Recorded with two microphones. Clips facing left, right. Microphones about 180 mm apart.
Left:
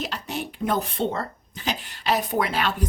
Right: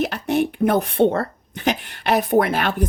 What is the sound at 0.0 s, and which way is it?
A woman's voice, 55° right (ahead or behind).